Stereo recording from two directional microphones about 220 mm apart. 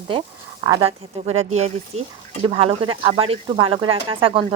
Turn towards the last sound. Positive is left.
turn(degrees=-25)  # may be behind; listen again after turning